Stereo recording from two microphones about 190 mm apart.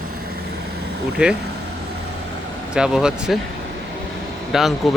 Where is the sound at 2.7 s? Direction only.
5° right (ahead or behind).